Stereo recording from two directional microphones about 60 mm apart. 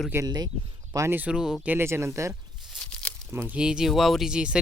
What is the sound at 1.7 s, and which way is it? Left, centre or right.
Speech, right.